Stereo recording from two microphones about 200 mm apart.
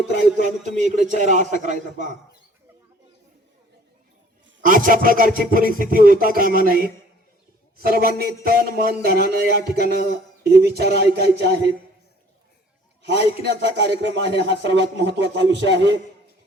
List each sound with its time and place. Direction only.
0.1 s music: 60° left (ahead or behind)
0.8 s a man's voice: 40° right (ahead or behind)
4.6 s music: 45° right (ahead or behind)
8.4 s speech: 50° right (ahead or behind)
13.1 s speech: 60° right (ahead or behind)